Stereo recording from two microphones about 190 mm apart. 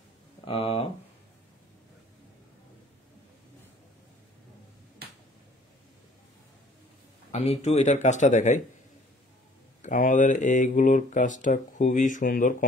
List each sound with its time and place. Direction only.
0.5 s speech: 30° left (ahead or behind)
7.3 s speech: 35° left (ahead or behind)
9.8 s speech: 45° left (ahead or behind)